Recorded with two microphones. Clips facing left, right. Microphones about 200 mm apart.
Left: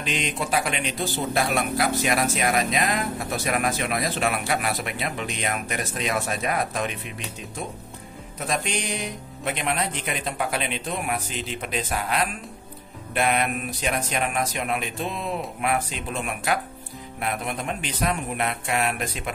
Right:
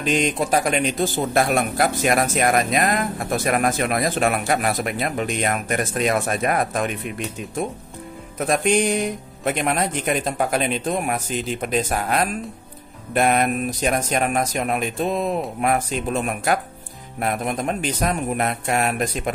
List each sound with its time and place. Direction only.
0.0 s speech: 45° right (ahead or behind)
8.5 s speech: 50° right (ahead or behind)